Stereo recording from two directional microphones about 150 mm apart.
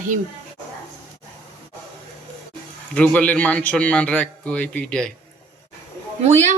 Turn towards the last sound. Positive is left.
turn(degrees=-50)  # may be behind; listen again after turning